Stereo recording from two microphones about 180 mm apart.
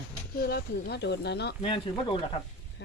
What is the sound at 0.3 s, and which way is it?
Speech, 60° left (ahead or behind).